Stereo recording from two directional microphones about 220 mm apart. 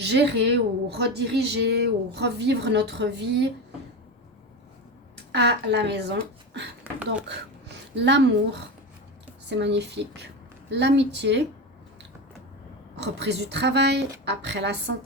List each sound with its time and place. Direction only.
0.0 s a woman's voice: 50° right (ahead or behind)
5.1 s speech: 50° right (ahead or behind)
7.9 s a woman's voice: 50° right (ahead or behind)
13.0 s a woman's voice: 50° right (ahead or behind)